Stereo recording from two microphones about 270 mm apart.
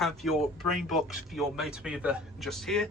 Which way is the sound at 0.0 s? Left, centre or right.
Centre.